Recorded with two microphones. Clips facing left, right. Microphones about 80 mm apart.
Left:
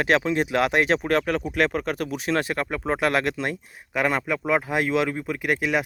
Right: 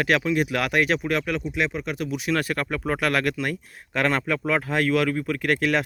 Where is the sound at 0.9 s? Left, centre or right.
Left.